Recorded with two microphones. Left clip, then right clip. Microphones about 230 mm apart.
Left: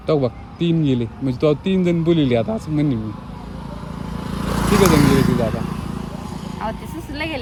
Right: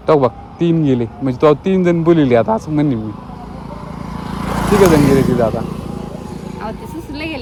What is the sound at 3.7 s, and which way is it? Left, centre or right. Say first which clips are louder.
Vehicle: right 3 dB; left.